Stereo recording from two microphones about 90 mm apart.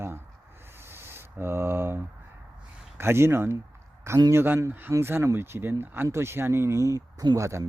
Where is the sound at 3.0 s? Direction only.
30° right (ahead or behind).